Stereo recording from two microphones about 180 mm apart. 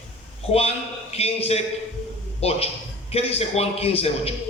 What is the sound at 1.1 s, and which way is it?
A man's voice, 35° left (ahead or behind).